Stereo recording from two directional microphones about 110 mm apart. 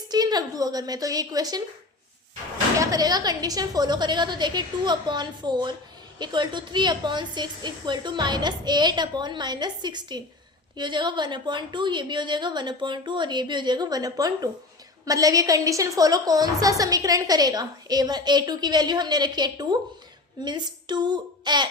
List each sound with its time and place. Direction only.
0.1 s a woman's voice: 40° right (ahead or behind)
2.7 s a woman's voice: 30° right (ahead or behind)